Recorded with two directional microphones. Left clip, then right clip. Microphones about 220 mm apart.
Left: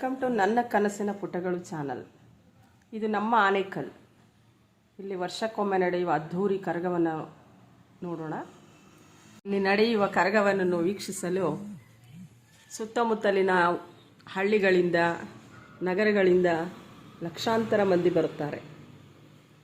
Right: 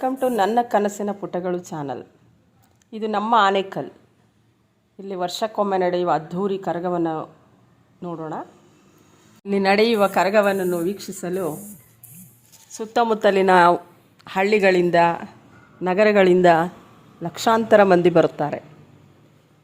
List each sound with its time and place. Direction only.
0.0 s speech: 25° right (ahead or behind)
5.0 s speech: 25° right (ahead or behind)
12.7 s a woman's voice: 30° right (ahead or behind)